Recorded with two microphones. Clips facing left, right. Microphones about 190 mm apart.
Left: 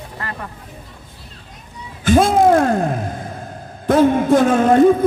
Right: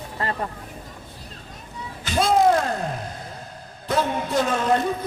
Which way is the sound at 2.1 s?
50° left (ahead or behind).